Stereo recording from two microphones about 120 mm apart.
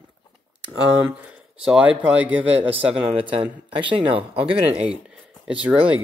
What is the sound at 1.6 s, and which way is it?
Speech, 10° right (ahead or behind).